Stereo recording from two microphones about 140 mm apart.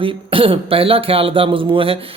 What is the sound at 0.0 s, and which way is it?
Speech, 40° right (ahead or behind).